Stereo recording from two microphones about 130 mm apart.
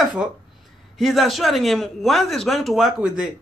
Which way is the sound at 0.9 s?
Centre (ahead or behind).